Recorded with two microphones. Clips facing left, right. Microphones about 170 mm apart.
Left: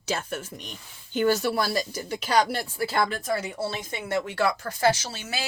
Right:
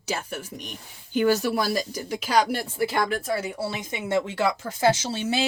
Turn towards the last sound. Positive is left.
turn(degrees=-25)  # may be behind; listen again after turning